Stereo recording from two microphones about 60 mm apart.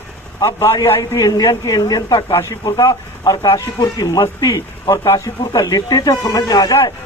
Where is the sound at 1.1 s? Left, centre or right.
Left.